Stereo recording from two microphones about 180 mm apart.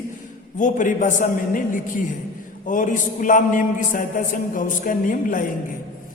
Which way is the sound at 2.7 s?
45° left (ahead or behind).